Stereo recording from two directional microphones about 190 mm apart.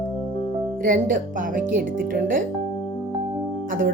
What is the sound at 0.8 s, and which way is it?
Speech, 45° right (ahead or behind).